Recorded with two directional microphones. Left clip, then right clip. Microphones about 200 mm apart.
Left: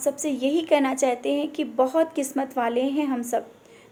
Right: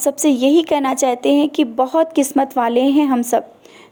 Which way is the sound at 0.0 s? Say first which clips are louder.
Right 9 dB; 40° right (ahead or behind).